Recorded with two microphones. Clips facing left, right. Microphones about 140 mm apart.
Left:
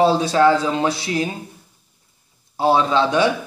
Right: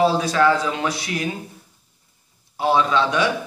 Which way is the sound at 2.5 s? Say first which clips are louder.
Left 2 dB; 35° left (ahead or behind).